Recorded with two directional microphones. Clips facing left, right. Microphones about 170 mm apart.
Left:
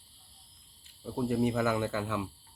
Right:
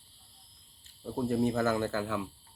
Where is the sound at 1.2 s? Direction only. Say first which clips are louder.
Even; 15° left (ahead or behind).